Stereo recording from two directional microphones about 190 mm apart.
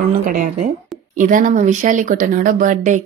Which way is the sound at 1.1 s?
45° right (ahead or behind).